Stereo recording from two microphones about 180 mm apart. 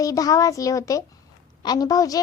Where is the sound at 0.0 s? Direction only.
20° left (ahead or behind).